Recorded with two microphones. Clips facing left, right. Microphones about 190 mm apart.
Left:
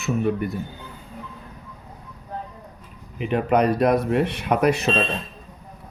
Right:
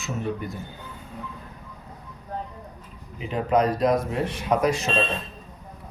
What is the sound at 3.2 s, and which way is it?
Speech, 65° left (ahead or behind).